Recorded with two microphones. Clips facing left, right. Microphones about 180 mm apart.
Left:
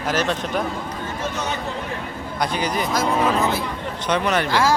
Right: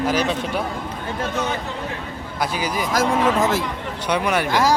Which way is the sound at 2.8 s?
90° right.